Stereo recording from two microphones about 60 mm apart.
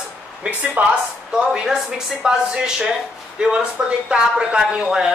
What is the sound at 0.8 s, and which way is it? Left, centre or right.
Speech, right.